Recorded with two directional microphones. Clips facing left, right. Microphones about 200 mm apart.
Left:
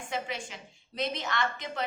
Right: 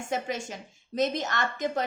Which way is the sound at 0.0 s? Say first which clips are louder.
Right 4 dB; 45° right (ahead or behind).